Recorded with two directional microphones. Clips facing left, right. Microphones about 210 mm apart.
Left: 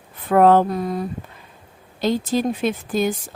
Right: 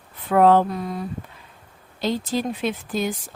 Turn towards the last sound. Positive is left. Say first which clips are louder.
# left 4 dB
turn(degrees=45)  # may be behind; listen again after turning